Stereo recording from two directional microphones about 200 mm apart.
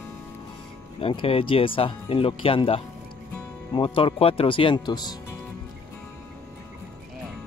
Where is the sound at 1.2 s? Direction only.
30° left (ahead or behind).